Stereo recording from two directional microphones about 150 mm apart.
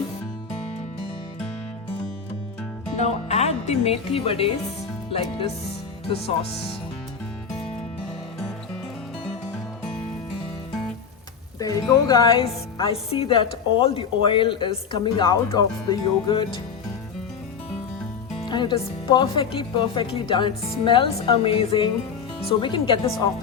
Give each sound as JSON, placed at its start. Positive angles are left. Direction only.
{"t": 3.0, "sound": "speech", "side_deg": 45}
{"t": 11.6, "sound": "speech", "side_deg": 25}
{"t": 18.4, "sound": "speech", "side_deg": 30}